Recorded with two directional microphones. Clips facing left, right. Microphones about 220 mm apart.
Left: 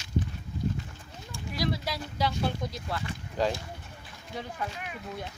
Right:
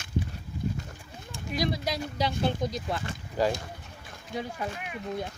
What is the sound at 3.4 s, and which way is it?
Speech, 5° right (ahead or behind).